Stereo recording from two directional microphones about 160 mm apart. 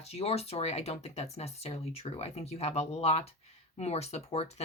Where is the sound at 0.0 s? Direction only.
40° left (ahead or behind).